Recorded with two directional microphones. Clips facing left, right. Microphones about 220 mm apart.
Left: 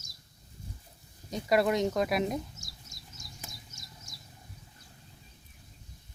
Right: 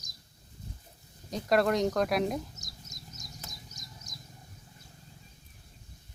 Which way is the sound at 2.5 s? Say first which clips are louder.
Right 2 dB; 20° right (ahead or behind).